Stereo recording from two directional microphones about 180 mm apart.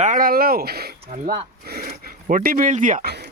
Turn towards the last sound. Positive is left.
turn(degrees=-65)  # may be behind; listen again after turning